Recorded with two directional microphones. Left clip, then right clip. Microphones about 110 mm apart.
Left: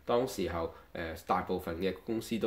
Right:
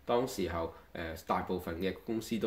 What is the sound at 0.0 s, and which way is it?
Speech, 20° left (ahead or behind).